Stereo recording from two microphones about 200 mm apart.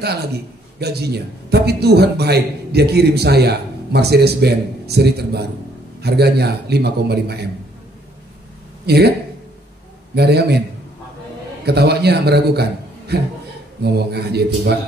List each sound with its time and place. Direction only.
0.7 s a man's voice: 55° right (ahead or behind)
8.8 s speech: 55° right (ahead or behind)
10.1 s a man's voice: 55° right (ahead or behind)
11.6 s a man's voice: 55° right (ahead or behind)